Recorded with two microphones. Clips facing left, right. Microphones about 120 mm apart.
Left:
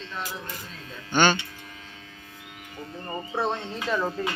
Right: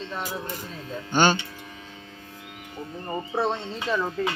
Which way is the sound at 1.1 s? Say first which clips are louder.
Right 1 dB; 35° right (ahead or behind).